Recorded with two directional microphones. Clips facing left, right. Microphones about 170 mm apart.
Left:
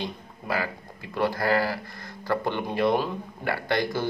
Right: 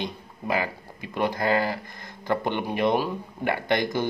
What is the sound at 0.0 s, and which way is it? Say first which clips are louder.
Speech: right 2 dB; 20° right (ahead or behind).